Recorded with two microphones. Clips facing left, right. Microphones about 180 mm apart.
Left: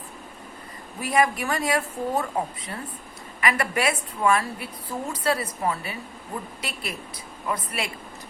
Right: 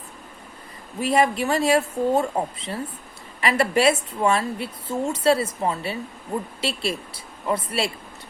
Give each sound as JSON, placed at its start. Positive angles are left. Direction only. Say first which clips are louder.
{"t": 0.9, "sound": "a woman's voice", "louder": "right 3 dB", "side_deg": -25}